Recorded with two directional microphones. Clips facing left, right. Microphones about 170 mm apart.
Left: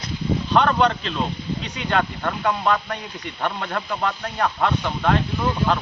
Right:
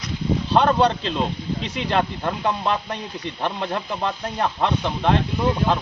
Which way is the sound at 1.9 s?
30° right (ahead or behind).